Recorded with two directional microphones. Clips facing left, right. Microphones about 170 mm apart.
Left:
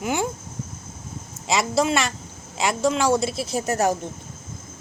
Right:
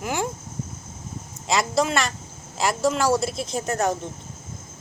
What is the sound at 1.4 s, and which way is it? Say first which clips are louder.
A woman's voice: left 1 dB; centre (ahead or behind).